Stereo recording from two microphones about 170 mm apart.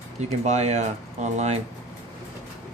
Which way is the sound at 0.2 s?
40° right (ahead or behind).